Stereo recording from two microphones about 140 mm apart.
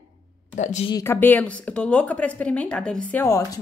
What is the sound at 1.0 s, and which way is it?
A woman's voice, 15° left (ahead or behind).